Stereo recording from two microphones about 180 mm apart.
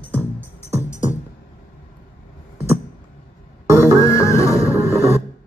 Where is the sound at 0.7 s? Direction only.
15° right (ahead or behind).